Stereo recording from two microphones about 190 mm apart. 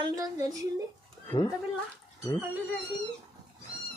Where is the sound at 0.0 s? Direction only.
20° right (ahead or behind).